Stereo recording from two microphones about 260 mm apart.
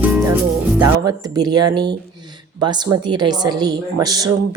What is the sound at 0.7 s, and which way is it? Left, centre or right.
A woman's voice, centre.